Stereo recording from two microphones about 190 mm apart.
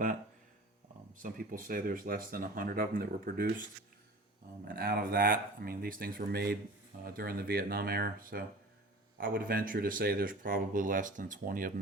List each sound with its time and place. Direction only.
1.2 s speech: 50° right (ahead or behind)
4.7 s speech: 50° right (ahead or behind)